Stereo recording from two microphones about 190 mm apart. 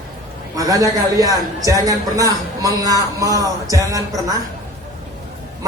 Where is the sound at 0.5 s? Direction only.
20° right (ahead or behind).